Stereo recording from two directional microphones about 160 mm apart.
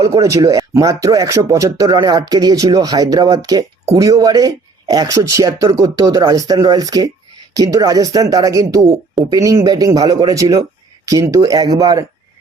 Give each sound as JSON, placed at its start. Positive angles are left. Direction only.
{"t": 0.0, "sound": "speech", "side_deg": -20}